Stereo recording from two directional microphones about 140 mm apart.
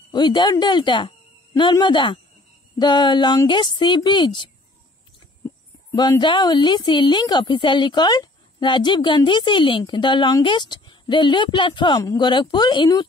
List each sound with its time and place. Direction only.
0.1 s a woman's voice: 30° left (ahead or behind)
5.9 s a woman's voice: 30° left (ahead or behind)